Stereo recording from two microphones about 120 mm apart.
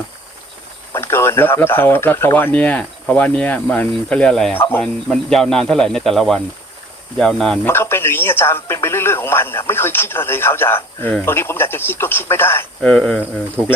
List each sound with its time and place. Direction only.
0.9 s speech: 20° left (ahead or behind); by 7.6 s 5° left (ahead or behind)
7.6 s speech: 20° left (ahead or behind)
12.8 s speech: 5° left (ahead or behind)